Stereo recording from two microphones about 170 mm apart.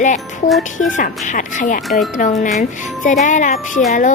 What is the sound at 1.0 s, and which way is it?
Speech, 50° left (ahead or behind).